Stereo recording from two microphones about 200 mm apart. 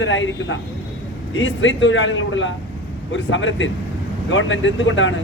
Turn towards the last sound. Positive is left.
turn(degrees=70)  # may be behind; listen again after turning